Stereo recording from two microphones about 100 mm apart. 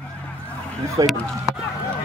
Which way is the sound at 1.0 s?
40° right (ahead or behind).